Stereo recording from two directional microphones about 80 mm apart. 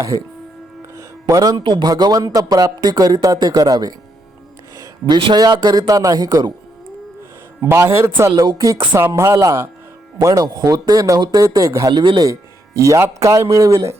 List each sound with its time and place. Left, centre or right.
0.9 s music: right
1.6 s speech: right
1.9 s speech: right
4.8 s a man's voice: right
7.9 s speech: right
10.4 s speech: right
11.9 s speech: right
12.2 s speech: right